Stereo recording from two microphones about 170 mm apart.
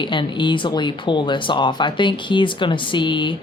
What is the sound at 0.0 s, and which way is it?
A woman's voice, 30° left (ahead or behind).